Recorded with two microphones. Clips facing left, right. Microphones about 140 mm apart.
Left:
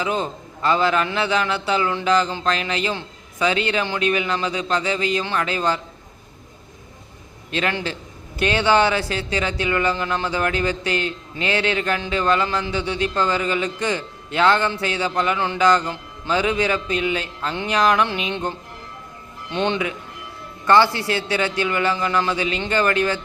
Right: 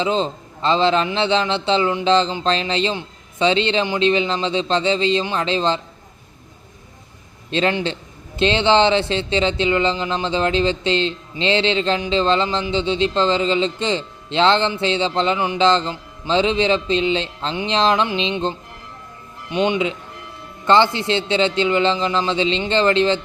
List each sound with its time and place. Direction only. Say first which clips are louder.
0.0 s speech: right 4 dB; 25° right (ahead or behind)
7.5 s speech: right 4 dB; 25° right (ahead or behind)